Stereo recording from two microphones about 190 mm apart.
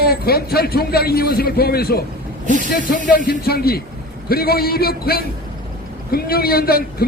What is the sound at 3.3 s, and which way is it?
A man's voice, 55° left (ahead or behind).